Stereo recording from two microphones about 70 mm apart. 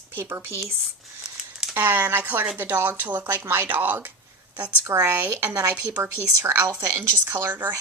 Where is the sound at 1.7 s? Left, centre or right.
Right.